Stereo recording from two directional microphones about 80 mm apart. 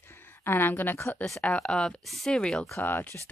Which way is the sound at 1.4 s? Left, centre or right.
Centre.